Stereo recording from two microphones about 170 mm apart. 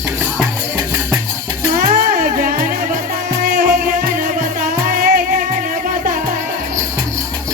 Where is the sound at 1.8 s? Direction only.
50° right (ahead or behind).